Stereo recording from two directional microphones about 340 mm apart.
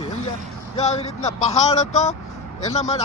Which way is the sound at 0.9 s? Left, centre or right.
Left.